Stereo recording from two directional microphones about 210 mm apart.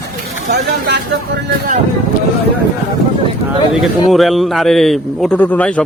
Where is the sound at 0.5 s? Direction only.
55° right (ahead or behind).